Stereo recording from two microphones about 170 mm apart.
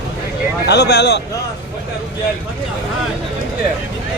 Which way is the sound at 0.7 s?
80° left.